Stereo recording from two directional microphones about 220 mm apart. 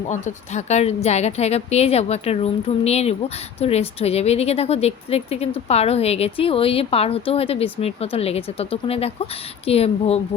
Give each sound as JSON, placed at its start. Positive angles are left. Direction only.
{"t": 0.1, "sound": "a woman's voice", "side_deg": 35}